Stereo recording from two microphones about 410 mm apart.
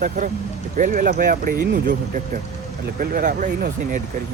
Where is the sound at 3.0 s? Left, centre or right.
Centre.